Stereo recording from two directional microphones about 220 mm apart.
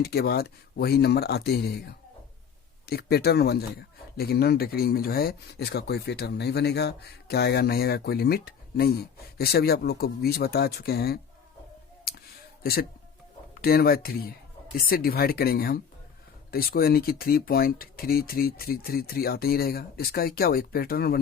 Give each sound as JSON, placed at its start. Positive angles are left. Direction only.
{"t": 0.0, "sound": "speech", "side_deg": 45}
{"t": 12.1, "sound": "a sound", "side_deg": 45}
{"t": 13.6, "sound": "speech", "side_deg": 45}